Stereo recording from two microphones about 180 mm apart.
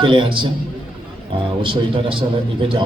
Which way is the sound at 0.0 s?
30° right (ahead or behind).